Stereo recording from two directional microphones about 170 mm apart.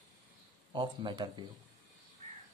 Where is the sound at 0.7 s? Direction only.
25° right (ahead or behind).